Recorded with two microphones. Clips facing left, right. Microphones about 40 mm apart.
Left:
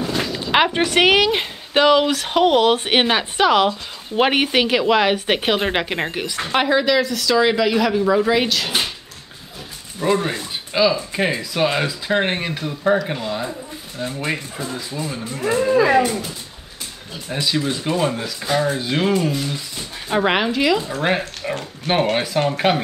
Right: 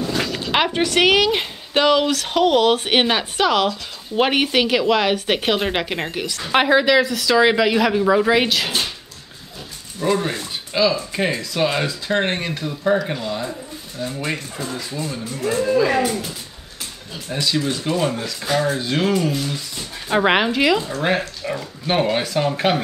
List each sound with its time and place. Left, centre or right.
0.4 s speech: centre
6.5 s speech: centre
9.9 s speech: centre
17.3 s speech: centre
20.1 s speech: centre
21.0 s speech: centre